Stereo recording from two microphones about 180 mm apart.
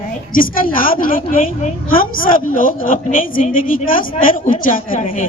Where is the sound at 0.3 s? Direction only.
50° left (ahead or behind).